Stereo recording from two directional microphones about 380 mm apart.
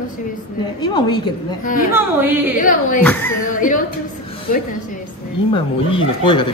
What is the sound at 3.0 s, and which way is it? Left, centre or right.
Speech, centre.